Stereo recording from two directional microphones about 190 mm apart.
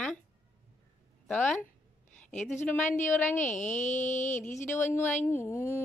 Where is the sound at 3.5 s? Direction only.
40° left (ahead or behind).